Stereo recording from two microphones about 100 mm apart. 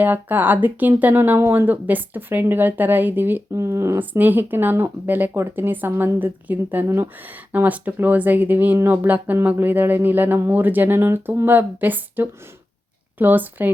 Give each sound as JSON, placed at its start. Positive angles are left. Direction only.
{"t": 0.0, "sound": "speech", "side_deg": -20}